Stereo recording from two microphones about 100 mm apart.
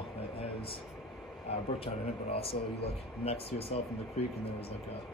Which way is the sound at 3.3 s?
75° left (ahead or behind).